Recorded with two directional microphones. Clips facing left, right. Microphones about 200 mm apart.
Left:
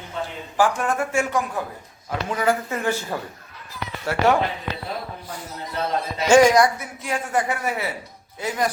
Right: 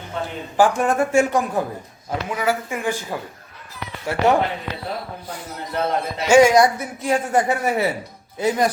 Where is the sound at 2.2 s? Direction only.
5° right (ahead or behind).